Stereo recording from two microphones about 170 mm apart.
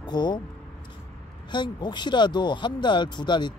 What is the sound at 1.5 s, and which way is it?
Speech, 25° left (ahead or behind).